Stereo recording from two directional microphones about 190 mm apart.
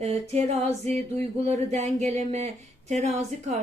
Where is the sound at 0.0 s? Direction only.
35° right (ahead or behind).